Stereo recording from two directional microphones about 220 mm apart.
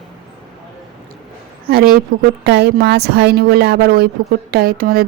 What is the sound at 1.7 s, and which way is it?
A woman's voice, 40° right (ahead or behind).